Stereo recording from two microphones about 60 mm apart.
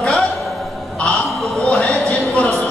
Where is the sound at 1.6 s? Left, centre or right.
Left.